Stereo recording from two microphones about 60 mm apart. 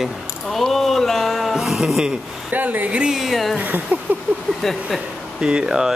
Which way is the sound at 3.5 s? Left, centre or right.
Right.